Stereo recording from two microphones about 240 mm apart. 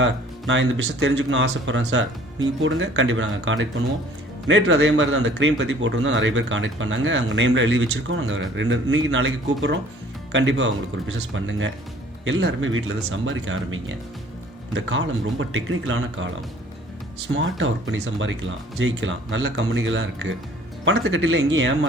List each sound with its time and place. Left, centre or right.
0.0 s speech: right
12.2 s speech: right
17.3 s speech: right